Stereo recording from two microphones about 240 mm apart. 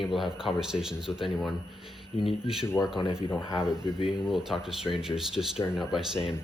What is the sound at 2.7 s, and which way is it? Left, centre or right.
Speech, centre.